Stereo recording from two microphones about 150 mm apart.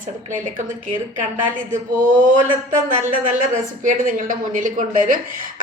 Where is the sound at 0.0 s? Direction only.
60° right (ahead or behind).